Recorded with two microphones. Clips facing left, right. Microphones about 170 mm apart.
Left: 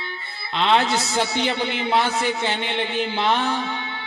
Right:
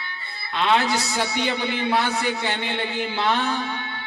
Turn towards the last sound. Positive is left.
turn(degrees=20)  # may be behind; listen again after turning